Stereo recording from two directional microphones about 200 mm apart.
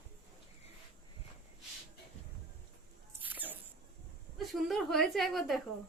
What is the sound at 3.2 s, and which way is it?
Mouse, 10° right (ahead or behind).